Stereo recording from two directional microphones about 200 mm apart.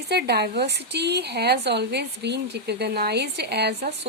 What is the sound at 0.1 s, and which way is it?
Speech, 55° right (ahead or behind).